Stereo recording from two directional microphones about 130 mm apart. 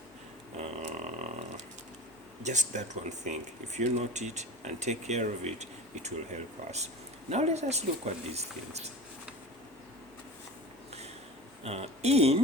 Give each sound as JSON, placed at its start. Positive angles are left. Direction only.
{"t": 0.5, "sound": "a sound", "side_deg": -60}
{"t": 2.4, "sound": "speech", "side_deg": -65}
{"t": 11.6, "sound": "speech", "side_deg": -55}